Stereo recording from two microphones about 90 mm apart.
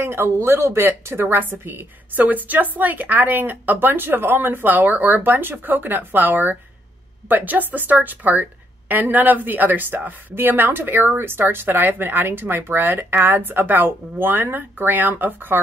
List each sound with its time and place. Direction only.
0.0 s a woman's voice: 25° right (ahead or behind)